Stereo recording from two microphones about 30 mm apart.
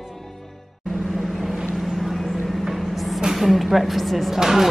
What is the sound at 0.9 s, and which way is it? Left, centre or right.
Vehicle, centre.